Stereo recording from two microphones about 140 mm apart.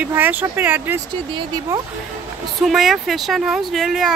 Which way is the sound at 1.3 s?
30° right (ahead or behind).